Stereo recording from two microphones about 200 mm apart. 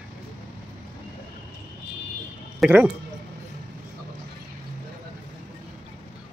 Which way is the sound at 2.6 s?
5° right (ahead or behind).